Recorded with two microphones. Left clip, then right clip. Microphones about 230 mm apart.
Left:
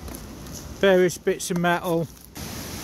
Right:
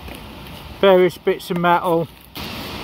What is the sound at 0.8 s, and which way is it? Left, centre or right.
Speech, centre.